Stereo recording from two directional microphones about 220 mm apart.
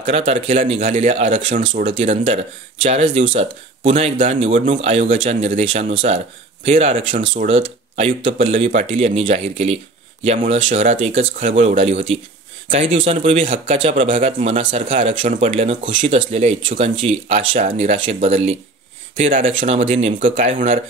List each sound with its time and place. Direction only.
0.0 s speech: 30° right (ahead or behind)